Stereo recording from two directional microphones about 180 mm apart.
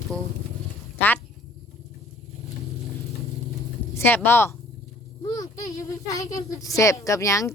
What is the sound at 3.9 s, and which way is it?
Speech, 10° left (ahead or behind).